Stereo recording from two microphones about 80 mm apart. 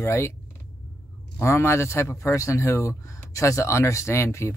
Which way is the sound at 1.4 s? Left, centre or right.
Left.